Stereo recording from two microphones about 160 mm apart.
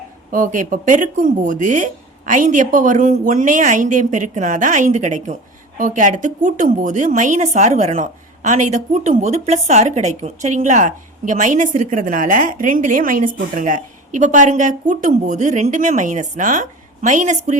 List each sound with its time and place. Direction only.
0.3 s speech: 60° right (ahead or behind)